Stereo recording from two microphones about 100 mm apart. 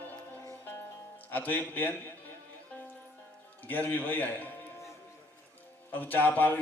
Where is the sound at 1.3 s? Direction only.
20° left (ahead or behind).